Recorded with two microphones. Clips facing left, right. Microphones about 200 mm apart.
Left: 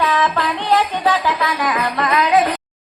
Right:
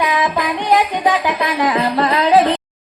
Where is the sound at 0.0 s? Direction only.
15° right (ahead or behind); by 2.6 s 30° right (ahead or behind).